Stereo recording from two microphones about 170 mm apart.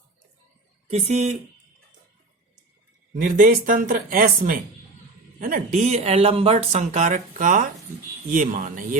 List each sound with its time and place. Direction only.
0.9 s speech: 40° right (ahead or behind)
3.2 s speech: 55° right (ahead or behind)